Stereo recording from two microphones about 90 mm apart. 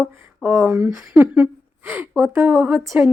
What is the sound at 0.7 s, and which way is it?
Speech, 10° right (ahead or behind).